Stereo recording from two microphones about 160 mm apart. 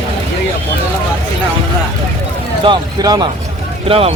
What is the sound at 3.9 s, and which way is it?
Speech, 35° right (ahead or behind).